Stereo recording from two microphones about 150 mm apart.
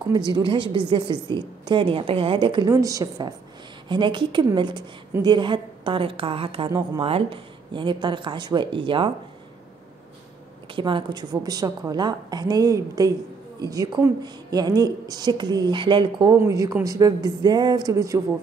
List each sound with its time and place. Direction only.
0.1 s a woman's voice: 30° right (ahead or behind)
2.7 s a woman's voice: 20° right (ahead or behind)
10.7 s a woman's voice: 35° right (ahead or behind)
16.4 s a woman's voice: 20° right (ahead or behind)